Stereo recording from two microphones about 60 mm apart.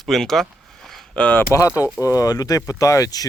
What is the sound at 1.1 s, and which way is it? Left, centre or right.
Speech, left.